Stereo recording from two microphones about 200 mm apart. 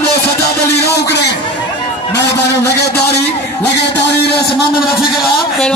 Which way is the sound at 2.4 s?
60° left (ahead or behind).